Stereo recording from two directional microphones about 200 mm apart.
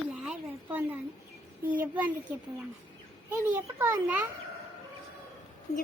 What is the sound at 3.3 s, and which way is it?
Speech, 10° right (ahead or behind).